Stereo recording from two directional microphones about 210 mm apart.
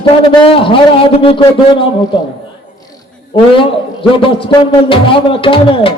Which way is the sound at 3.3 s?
25° left (ahead or behind).